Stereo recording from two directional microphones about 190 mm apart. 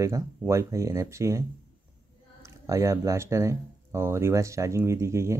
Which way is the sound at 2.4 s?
15° right (ahead or behind).